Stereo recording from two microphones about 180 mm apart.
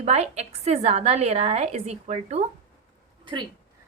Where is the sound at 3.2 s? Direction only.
25° right (ahead or behind).